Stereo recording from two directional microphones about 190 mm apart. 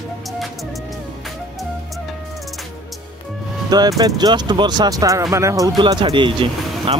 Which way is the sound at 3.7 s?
20° right (ahead or behind).